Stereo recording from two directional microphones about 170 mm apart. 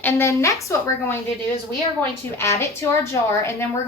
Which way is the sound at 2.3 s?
15° left (ahead or behind).